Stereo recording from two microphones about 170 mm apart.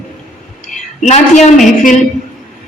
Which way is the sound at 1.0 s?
45° left (ahead or behind).